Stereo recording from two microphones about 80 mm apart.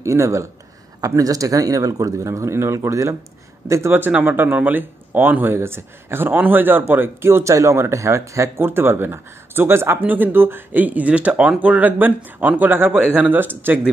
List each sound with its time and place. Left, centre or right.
0.0 s speech: right